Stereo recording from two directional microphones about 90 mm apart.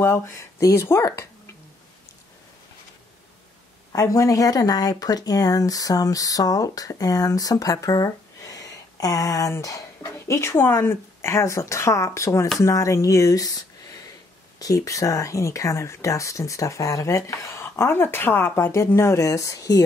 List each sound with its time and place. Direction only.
0.0 s speech: 30° left (ahead or behind)
3.9 s speech: 40° left (ahead or behind)